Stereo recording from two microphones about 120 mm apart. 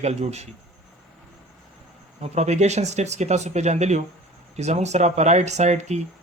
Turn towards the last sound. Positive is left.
turn(degrees=-70)  # may be behind; listen again after turning